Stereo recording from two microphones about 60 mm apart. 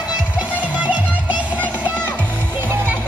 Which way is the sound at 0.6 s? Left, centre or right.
Right.